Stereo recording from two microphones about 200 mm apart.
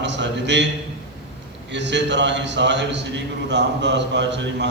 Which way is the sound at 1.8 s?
60° right (ahead or behind).